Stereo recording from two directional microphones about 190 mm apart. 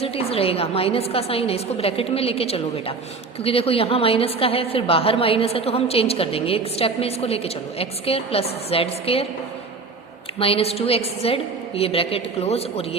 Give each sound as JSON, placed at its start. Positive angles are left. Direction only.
{"t": 0.0, "sound": "a woman's voice", "side_deg": 30}
{"t": 10.3, "sound": "a woman's voice", "side_deg": 30}